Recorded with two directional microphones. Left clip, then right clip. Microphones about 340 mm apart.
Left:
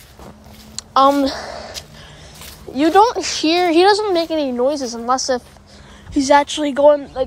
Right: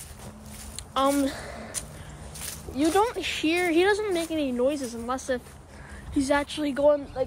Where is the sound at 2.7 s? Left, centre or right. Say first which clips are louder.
Left 11 dB; left.